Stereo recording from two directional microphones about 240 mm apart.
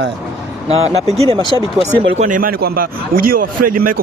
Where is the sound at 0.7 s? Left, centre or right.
Right.